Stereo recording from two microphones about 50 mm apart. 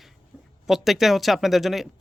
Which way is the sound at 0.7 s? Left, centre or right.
Centre.